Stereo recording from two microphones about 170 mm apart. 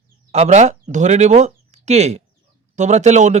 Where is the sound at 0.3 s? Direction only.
40° right (ahead or behind).